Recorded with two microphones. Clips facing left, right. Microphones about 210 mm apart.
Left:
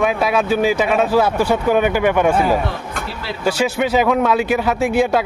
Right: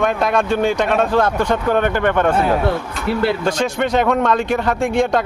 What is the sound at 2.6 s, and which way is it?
Speech, 60° right (ahead or behind).